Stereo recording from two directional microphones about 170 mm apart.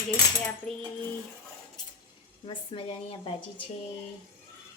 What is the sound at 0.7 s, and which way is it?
Speech, 5° left (ahead or behind).